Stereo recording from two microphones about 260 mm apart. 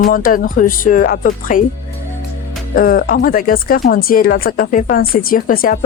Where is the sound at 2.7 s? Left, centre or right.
Left.